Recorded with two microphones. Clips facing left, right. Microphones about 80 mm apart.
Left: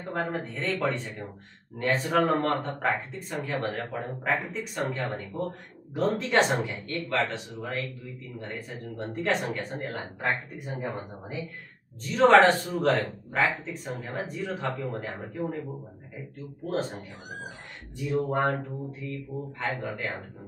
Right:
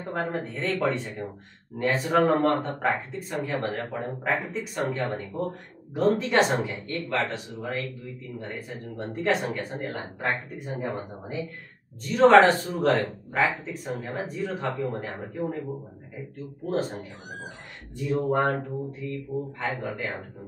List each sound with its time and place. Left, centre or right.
0.0 s speech: centre
12.0 s speech: centre
18.0 s speech: centre